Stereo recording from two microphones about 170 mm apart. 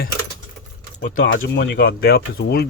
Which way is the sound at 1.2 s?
80° left.